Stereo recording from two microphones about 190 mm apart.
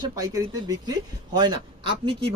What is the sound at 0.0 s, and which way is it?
Speech, 20° right (ahead or behind).